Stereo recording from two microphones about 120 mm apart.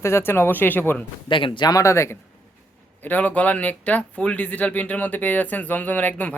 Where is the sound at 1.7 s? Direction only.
25° left (ahead or behind).